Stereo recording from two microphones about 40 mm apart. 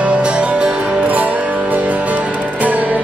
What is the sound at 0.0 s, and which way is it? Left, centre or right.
Music, right.